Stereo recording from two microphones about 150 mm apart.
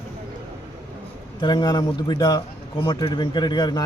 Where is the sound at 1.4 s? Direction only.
30° left (ahead or behind).